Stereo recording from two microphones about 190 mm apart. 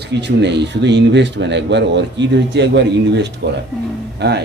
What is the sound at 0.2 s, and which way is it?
Speech, 65° right (ahead or behind).